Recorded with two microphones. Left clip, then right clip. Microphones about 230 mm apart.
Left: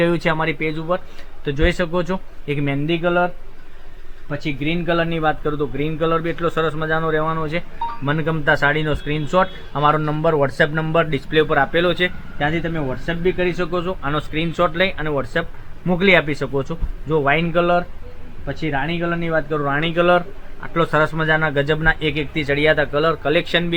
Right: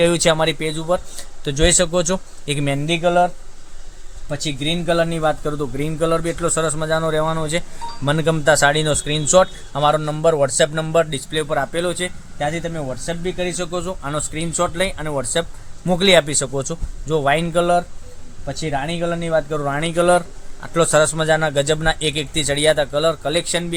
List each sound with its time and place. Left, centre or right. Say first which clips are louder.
0.0 s speech: right 3 dB; right